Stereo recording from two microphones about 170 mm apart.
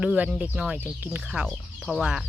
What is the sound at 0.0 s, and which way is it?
Speech, 5° right (ahead or behind).